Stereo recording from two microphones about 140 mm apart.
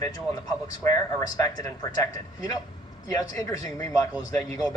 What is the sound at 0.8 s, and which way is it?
Speech, 25° left (ahead or behind).